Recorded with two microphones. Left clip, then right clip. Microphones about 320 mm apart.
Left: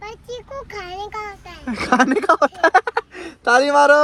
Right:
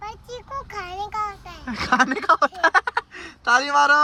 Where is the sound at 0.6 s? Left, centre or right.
Right.